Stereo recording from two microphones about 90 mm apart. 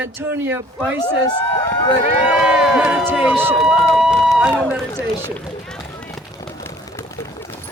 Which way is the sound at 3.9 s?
5° right (ahead or behind).